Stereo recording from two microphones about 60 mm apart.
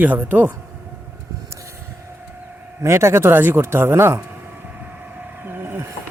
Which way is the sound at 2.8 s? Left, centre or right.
Right.